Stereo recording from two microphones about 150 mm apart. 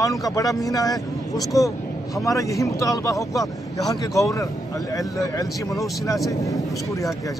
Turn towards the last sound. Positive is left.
turn(degrees=20)  # may be behind; listen again after turning